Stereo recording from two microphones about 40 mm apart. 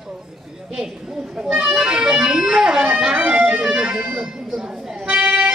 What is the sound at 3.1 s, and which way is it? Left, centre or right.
Music, right.